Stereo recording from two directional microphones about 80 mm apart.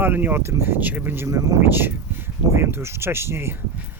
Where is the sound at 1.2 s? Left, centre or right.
Right.